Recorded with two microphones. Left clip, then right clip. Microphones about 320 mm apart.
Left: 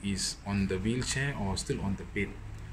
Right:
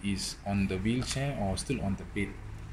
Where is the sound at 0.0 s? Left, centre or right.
Left.